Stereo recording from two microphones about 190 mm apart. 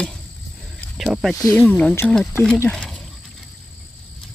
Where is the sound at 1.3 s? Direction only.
15° left (ahead or behind).